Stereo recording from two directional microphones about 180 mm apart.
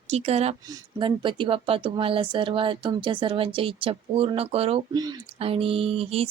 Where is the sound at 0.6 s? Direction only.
25° right (ahead or behind).